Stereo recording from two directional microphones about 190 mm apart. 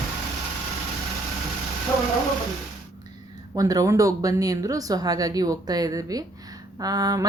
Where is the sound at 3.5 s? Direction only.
20° right (ahead or behind).